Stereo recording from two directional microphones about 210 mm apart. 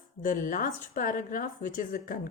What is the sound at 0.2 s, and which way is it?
A woman's voice, 40° left (ahead or behind).